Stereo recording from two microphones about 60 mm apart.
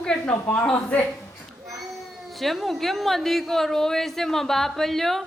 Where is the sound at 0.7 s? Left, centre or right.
Left.